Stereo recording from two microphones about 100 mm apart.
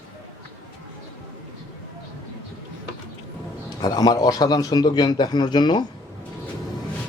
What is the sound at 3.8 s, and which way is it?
A man's voice, 40° left (ahead or behind).